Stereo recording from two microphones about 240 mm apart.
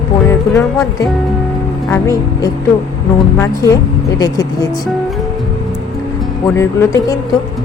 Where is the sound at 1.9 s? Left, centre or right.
Centre.